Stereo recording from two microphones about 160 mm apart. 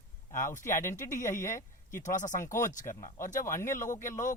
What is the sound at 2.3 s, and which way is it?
Speech, 15° left (ahead or behind).